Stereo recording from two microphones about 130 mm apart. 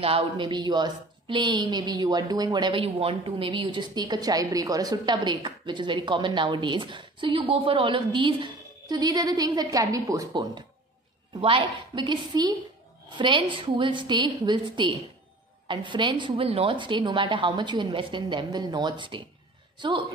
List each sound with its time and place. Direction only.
0.0 s a woman's voice: 40° right (ahead or behind)
11.4 s a woman's voice: 40° right (ahead or behind)